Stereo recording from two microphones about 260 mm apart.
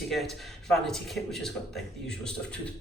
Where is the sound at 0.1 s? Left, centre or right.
Centre.